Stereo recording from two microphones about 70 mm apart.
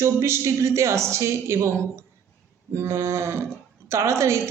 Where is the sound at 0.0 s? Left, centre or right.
Right.